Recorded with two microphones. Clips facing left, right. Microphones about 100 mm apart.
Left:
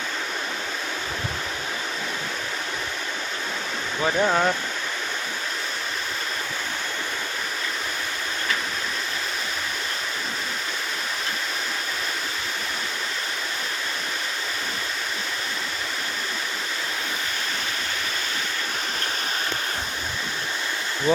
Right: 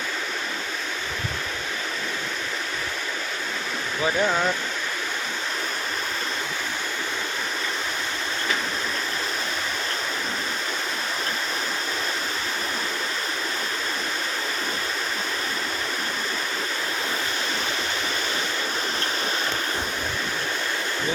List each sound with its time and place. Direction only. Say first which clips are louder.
4.0 s speech: left 2 dB; 20° left (ahead or behind)